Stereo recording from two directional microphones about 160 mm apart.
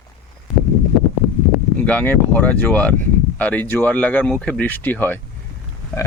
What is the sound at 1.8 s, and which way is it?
Speech, 10° left (ahead or behind).